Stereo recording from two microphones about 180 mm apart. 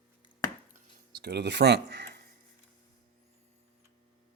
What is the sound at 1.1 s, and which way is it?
Speech, 65° right (ahead or behind).